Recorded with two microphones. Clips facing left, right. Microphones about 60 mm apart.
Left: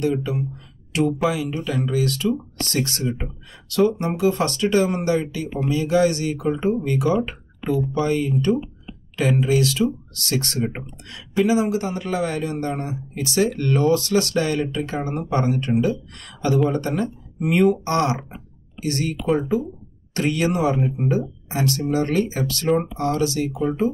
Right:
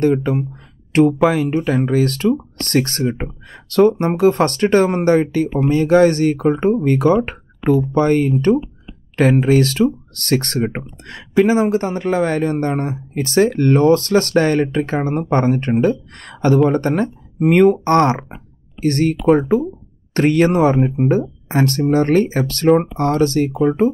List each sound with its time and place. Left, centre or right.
0.0 s speech: right
7.2 s a sound: right
8.0 s speech: right
20.2 s speech: right